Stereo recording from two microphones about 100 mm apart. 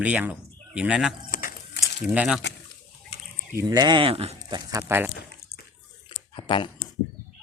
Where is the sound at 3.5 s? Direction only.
40° right (ahead or behind).